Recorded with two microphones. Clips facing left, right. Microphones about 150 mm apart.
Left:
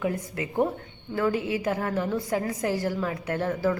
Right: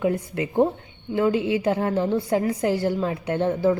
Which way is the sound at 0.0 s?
25° right (ahead or behind).